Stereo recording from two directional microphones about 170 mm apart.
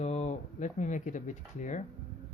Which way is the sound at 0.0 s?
40° left (ahead or behind).